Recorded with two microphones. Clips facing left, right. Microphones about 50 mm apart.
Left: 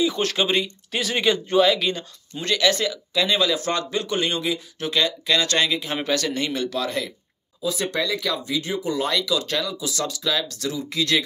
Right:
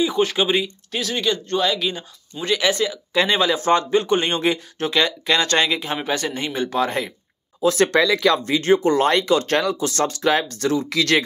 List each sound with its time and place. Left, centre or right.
0.0 s speech: centre
1.1 s speech: centre
1.7 s speech: centre
2.4 s speech: centre
3.1 s speech: right
6.0 s speech: right
7.6 s speech: right
10.9 s speech: right